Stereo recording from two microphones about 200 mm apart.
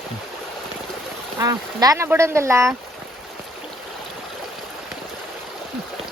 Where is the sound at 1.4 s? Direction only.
15° right (ahead or behind).